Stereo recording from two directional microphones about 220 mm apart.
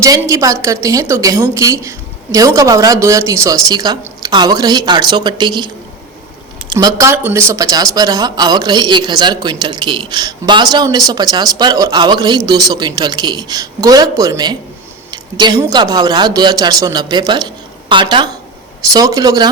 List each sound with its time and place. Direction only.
0.0 s a woman's voice: 15° right (ahead or behind)